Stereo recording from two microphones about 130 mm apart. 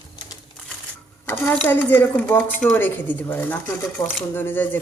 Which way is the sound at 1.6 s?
15° left (ahead or behind).